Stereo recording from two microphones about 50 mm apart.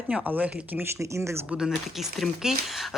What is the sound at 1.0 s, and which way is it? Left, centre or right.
Speech, right.